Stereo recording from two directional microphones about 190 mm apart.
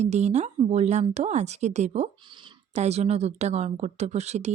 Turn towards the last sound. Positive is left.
turn(degrees=-35)  # may be behind; listen again after turning